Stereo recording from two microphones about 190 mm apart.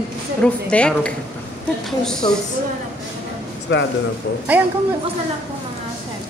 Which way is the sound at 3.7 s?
70° left (ahead or behind).